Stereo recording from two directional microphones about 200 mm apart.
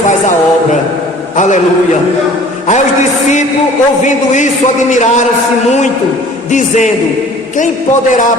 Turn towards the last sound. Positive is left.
turn(degrees=35)  # may be behind; listen again after turning